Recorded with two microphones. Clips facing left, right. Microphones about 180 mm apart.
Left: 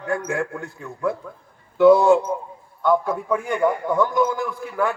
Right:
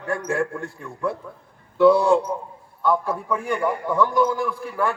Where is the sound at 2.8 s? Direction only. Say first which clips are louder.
Left 2 dB; 30° right (ahead or behind).